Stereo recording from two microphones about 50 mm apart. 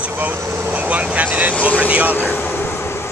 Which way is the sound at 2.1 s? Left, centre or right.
Left.